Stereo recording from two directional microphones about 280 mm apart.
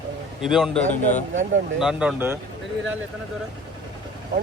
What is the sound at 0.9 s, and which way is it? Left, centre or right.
Speech, left.